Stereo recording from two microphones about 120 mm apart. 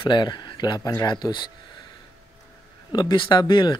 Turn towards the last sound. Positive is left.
turn(degrees=40)  # may be behind; listen again after turning